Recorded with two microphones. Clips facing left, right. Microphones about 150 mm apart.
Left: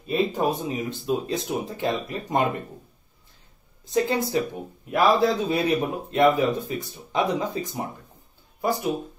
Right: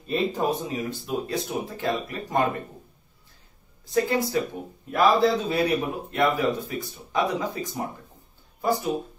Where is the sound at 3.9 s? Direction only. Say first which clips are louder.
Even; 20° left (ahead or behind).